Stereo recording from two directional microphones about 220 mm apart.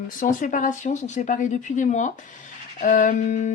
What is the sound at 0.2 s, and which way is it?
Speech, 35° left (ahead or behind).